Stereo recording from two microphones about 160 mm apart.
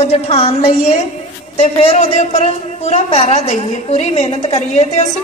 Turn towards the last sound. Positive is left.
turn(degrees=45)  # may be behind; listen again after turning